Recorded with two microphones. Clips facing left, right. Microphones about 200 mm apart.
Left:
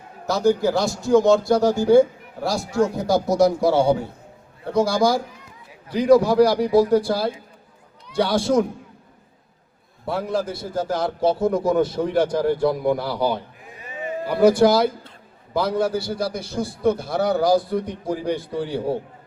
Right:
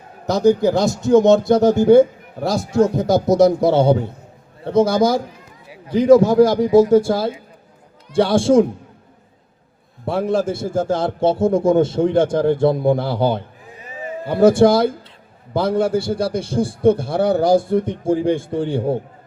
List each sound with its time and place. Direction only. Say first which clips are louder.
0.3 s a man's voice: right 4 dB; 20° right (ahead or behind)
10.1 s a man's voice: right 5 dB; 25° right (ahead or behind)